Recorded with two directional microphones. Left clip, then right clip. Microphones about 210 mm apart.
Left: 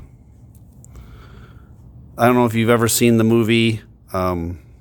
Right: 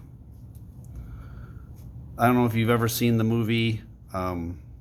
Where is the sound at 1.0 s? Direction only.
50° left (ahead or behind).